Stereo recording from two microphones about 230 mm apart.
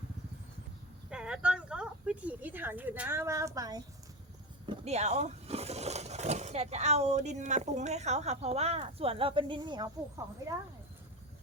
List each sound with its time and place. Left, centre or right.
1.1 s speech: centre